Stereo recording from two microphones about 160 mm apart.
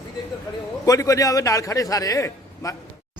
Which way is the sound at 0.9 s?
20° left (ahead or behind).